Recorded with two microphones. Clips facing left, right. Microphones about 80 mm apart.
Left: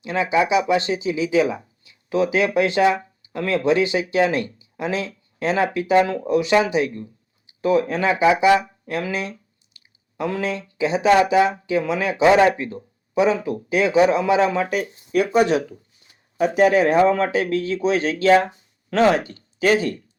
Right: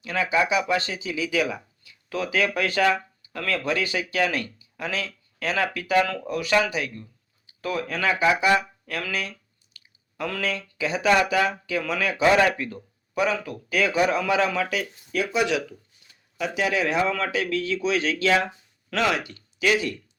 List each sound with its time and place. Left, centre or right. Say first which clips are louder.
0.0 s speech: left 4 dB; left
15.1 s speech: left 7 dB; left